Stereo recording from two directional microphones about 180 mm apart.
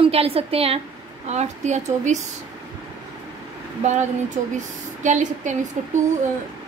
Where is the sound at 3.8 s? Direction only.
40° right (ahead or behind).